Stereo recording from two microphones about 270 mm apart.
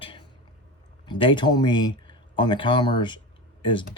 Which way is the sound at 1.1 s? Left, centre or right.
Centre.